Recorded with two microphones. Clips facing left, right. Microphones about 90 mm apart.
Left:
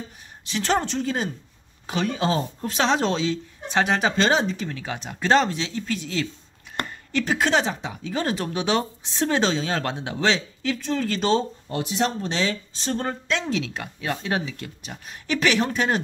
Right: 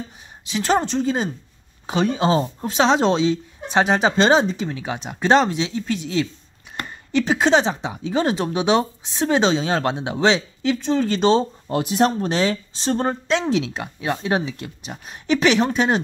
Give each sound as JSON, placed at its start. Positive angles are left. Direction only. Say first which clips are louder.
{"t": 0.5, "sound": "speech", "louder": "right 4 dB", "side_deg": -15}
{"t": 11.9, "sound": "speech", "louder": "right 6 dB", "side_deg": -50}